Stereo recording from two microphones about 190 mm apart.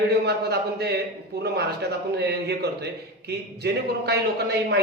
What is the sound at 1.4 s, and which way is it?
A man's voice, 60° right (ahead or behind).